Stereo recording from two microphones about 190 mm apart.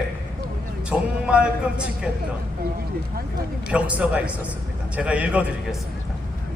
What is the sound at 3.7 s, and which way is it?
A man's voice, 5° right (ahead or behind).